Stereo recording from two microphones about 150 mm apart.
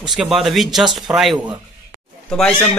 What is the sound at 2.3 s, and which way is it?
Speech, 5° left (ahead or behind).